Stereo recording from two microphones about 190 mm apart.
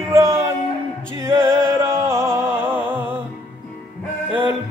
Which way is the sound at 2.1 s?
15° right (ahead or behind).